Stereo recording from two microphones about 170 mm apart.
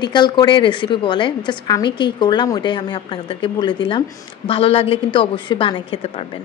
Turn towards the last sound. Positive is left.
turn(degrees=35)  # may be behind; listen again after turning